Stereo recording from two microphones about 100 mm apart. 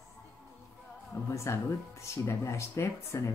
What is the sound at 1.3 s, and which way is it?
Speech, 30° left (ahead or behind).